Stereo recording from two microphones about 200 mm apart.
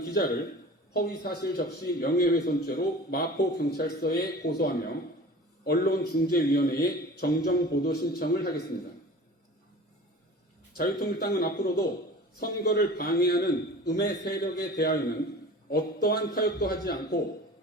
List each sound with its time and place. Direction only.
0.9 s a man's voice: 50° left (ahead or behind)
10.8 s a man's voice: 50° left (ahead or behind)